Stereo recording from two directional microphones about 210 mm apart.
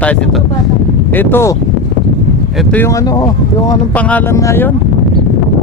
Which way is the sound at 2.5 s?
Centre (ahead or behind).